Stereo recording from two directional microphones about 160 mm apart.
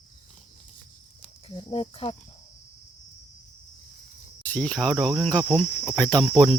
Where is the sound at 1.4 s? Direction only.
35° left (ahead or behind).